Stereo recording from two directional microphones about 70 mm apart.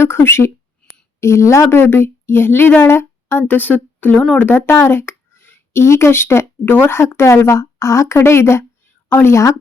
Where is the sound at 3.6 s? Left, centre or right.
Left.